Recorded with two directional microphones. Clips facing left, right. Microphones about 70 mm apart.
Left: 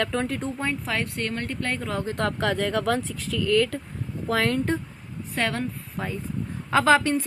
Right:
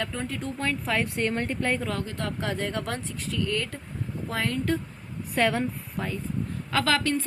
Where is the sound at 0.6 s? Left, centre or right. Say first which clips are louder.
Right 3 dB; centre.